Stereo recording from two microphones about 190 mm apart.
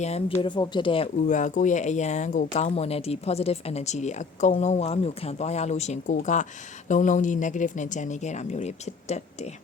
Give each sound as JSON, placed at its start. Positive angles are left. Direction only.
{"t": 0.0, "sound": "speech", "side_deg": 35}
{"t": 0.4, "sound": "speech", "side_deg": 25}
{"t": 1.3, "sound": "speech", "side_deg": 40}